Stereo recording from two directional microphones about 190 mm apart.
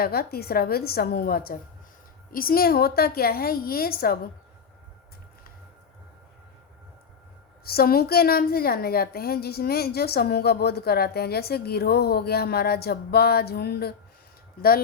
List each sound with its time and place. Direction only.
0.0 s a woman's voice: 55° left (ahead or behind)
7.6 s a woman's voice: 55° left (ahead or behind)